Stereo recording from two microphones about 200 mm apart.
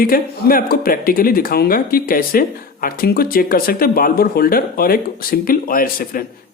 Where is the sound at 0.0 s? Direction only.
45° left (ahead or behind).